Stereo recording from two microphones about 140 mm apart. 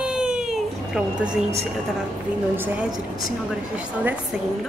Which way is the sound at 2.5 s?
15° right (ahead or behind).